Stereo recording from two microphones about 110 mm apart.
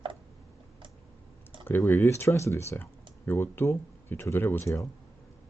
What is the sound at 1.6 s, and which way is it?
Speech, 20° left (ahead or behind).